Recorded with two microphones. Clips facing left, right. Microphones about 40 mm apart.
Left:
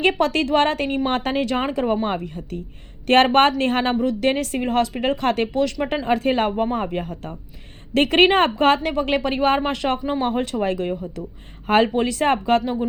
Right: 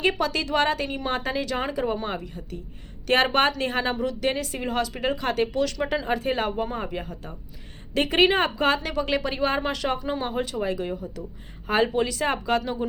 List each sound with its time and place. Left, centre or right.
0.0 s a woman's voice: left
5.5 s a woman's voice: left
10.0 s speech: left
10.2 s a woman's voice: left